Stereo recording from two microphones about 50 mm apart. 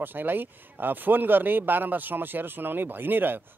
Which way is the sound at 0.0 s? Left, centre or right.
Right.